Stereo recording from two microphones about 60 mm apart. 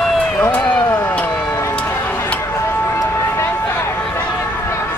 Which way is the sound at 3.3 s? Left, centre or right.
Left.